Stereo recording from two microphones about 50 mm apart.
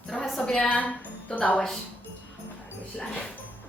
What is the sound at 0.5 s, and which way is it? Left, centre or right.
Speech, left.